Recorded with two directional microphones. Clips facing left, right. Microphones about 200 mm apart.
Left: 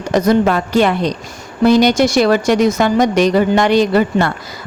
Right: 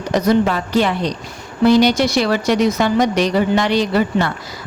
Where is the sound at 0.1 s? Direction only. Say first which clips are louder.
Left 3 dB; 50° left (ahead or behind).